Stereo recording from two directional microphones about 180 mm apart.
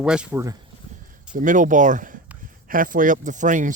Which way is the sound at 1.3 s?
45° right (ahead or behind).